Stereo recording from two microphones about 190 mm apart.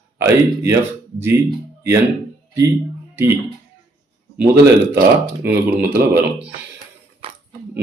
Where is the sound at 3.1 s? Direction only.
15° right (ahead or behind).